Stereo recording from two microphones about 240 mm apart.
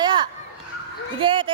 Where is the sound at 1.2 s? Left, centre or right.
Right.